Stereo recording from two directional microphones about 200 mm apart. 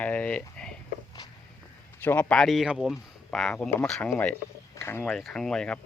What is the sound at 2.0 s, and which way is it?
Speech, 10° left (ahead or behind).